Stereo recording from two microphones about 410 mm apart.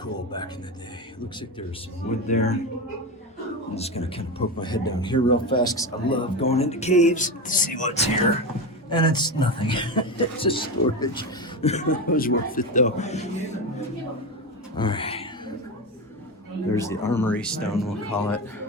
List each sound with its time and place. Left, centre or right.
0.0 s speech: centre
2.2 s speech: centre
3.8 s speech: centre
14.8 s a sound: centre
16.7 s speech: centre